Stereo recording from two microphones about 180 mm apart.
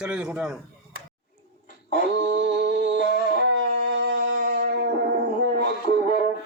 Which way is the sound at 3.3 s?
70° right (ahead or behind).